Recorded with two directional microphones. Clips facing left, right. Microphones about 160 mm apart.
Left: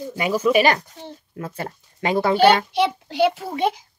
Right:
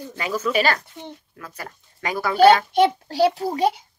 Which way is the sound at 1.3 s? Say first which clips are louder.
Left 7 dB; 25° left (ahead or behind).